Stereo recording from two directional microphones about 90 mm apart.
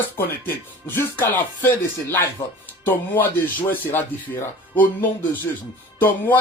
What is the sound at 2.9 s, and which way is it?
Speech, 20° left (ahead or behind).